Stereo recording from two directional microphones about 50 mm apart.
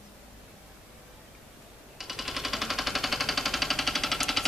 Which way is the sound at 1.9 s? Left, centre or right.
Centre.